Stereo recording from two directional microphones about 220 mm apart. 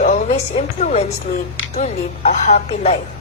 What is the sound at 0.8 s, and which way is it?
A woman's voice, 30° left (ahead or behind).